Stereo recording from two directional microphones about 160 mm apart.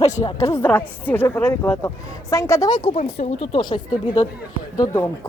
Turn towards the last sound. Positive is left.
turn(degrees=20)  # may be behind; listen again after turning